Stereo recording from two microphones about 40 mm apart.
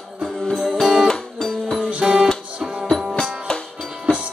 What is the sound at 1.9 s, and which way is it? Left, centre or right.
Music, right.